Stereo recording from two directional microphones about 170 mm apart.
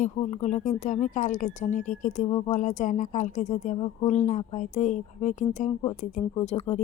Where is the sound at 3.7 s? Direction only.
25° left (ahead or behind).